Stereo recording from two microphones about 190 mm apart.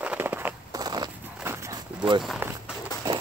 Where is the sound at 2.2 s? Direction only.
5° right (ahead or behind).